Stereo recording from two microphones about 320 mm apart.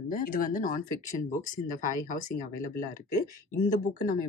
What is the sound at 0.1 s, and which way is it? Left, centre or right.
Speech, left.